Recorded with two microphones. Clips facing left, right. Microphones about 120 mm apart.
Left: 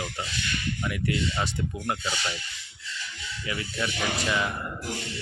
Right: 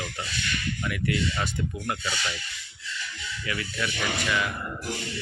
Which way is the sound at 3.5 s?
25° left (ahead or behind).